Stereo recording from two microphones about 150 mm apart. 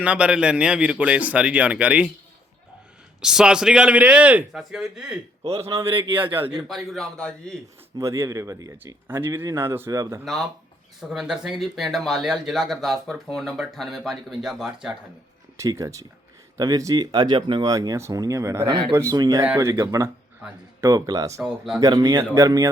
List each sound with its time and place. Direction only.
0.0 s a man's voice: 10° right (ahead or behind)
3.2 s speech: 5° right (ahead or behind)
5.4 s a man's voice: 40° right (ahead or behind)
6.2 s a man's voice: 15° right (ahead or behind)
6.7 s speech: centre (ahead or behind)
7.9 s a man's voice: 20° right (ahead or behind)
11.1 s speech: 5° right (ahead or behind)
15.5 s speech: 20° right (ahead or behind)
18.7 s speech: 40° right (ahead or behind)
18.9 s speech: 25° right (ahead or behind)
20.4 s a man's voice: 5° right (ahead or behind)
20.8 s speech: 25° right (ahead or behind)
21.4 s speech: 5° right (ahead or behind)
21.8 s speech: 25° right (ahead or behind)